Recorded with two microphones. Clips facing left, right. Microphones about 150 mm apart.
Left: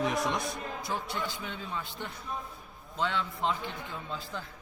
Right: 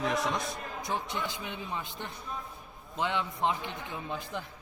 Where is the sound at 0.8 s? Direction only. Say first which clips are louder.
Right 2 dB; 20° right (ahead or behind).